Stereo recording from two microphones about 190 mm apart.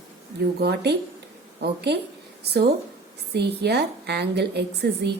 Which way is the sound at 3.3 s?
60° right (ahead or behind).